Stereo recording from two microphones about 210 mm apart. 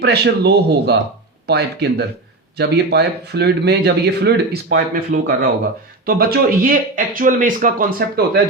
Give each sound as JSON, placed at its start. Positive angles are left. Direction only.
{"t": 0.0, "sound": "speech", "side_deg": -50}